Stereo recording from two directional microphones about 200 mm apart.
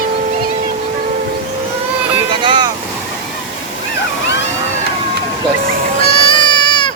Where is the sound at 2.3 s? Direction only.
25° right (ahead or behind).